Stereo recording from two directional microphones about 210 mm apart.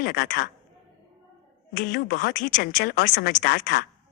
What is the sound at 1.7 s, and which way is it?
Speech, 40° left (ahead or behind).